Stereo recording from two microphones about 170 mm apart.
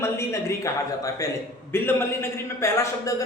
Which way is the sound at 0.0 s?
15° left (ahead or behind).